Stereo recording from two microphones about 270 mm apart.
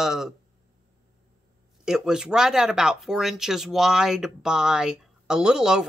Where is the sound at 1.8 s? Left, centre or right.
Centre.